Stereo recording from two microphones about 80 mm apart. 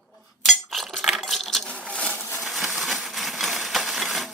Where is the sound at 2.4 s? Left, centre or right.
Centre.